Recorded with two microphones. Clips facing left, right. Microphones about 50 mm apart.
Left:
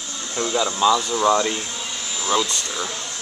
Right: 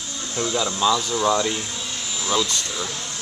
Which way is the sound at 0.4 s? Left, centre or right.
Centre.